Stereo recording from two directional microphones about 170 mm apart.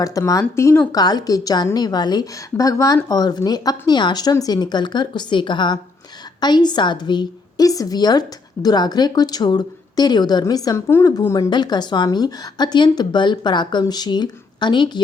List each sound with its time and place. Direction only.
0.0 s a woman's voice: 20° left (ahead or behind)